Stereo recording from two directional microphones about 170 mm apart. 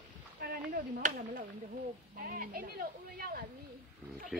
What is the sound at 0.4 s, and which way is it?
Chop, 60° right (ahead or behind).